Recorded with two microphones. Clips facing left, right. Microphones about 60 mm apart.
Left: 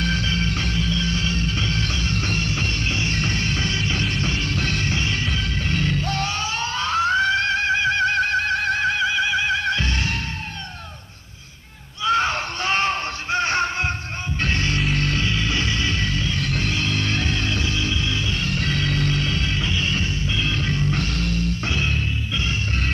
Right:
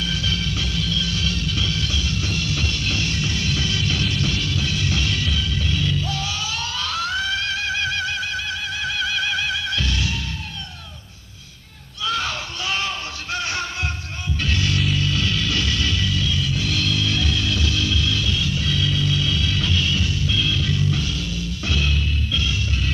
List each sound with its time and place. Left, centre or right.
0.0 s music: left
4.6 s music: left
4.9 s music: left
8.9 s a sound: left
9.5 s music: left
12.0 s a sound: left
14.4 s music: left
15.1 s music: left
16.3 s music: left
16.7 s music: left
18.4 s music: left
21.6 s music: left